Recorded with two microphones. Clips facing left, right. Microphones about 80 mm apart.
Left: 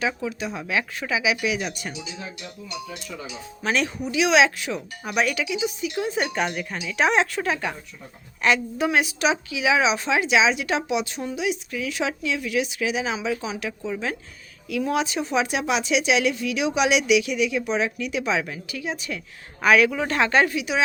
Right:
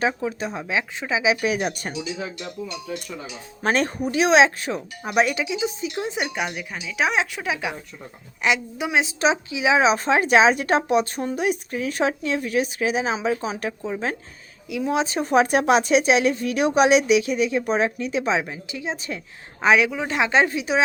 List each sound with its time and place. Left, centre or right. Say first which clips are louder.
0.0 s speech: right 3 dB; right
0.7 s speech: even; right
3.6 s speech: right 3 dB; right
5.2 s speech: even; right
6.2 s speech: left 2 dB; centre; by 9.8 s right
9.8 s speech: right 3 dB; right
14.7 s speech: right 1 dB; right
15.0 s speech: right 5 dB; right